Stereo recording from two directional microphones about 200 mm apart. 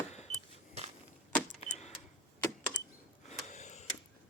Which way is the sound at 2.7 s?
65° left (ahead or behind).